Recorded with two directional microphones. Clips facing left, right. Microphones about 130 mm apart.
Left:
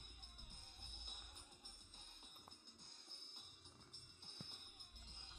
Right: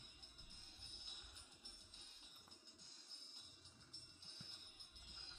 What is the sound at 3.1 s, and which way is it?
Music, 55° left (ahead or behind).